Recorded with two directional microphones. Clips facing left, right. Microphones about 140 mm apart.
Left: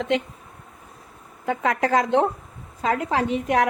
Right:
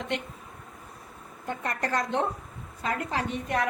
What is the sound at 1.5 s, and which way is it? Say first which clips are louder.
A woman's voice: left 9 dB; 90° left.